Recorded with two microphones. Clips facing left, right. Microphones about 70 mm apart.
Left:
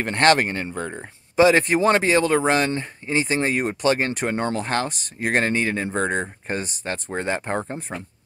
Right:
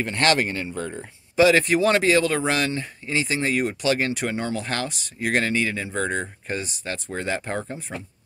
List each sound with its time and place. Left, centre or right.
0.0 s speech: left